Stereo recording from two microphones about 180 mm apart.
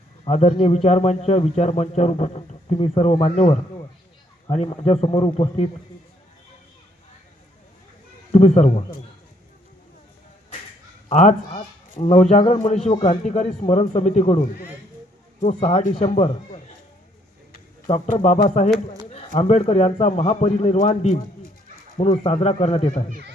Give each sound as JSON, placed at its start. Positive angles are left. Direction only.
{"t": 0.3, "sound": "speech", "side_deg": 40}
{"t": 8.3, "sound": "speech", "side_deg": 40}
{"t": 11.1, "sound": "speech", "side_deg": 40}
{"t": 17.8, "sound": "speech", "side_deg": 35}